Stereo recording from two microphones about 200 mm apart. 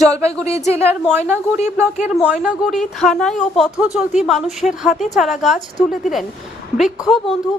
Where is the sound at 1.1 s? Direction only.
10° right (ahead or behind).